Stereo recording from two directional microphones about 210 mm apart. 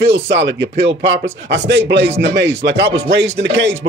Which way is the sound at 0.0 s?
55° right (ahead or behind).